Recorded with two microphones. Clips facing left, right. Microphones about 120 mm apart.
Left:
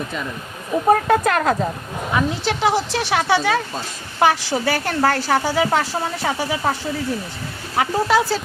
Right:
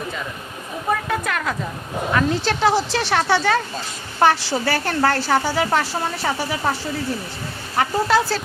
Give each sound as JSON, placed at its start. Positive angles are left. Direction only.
{"t": 0.9, "sound": "speech", "side_deg": 40}
{"t": 2.1, "sound": "speech", "side_deg": 10}
{"t": 7.8, "sound": "speech", "side_deg": 5}